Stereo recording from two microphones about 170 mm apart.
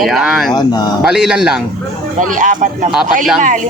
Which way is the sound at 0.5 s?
25° left (ahead or behind).